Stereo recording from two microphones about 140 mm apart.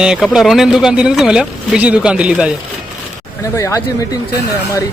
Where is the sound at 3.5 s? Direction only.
20° left (ahead or behind).